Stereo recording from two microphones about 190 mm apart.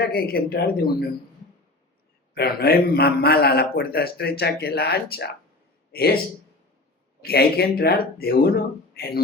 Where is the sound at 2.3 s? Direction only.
55° left (ahead or behind).